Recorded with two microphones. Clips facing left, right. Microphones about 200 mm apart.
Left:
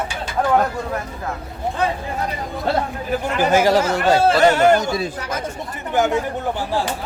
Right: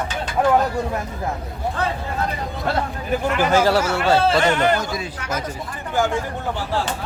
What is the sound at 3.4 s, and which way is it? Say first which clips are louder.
A man's voice: left 3 dB; 15° left (ahead or behind).